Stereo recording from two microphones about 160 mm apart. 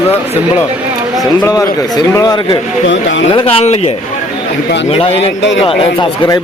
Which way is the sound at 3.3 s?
40° left (ahead or behind).